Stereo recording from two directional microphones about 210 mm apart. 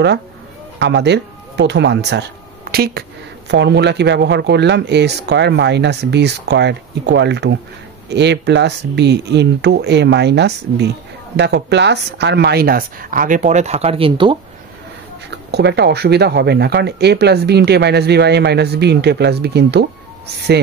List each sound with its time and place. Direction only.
0.7 s speech: 55° right (ahead or behind); by 14.4 s 25° right (ahead or behind)
15.5 s speech: 55° right (ahead or behind)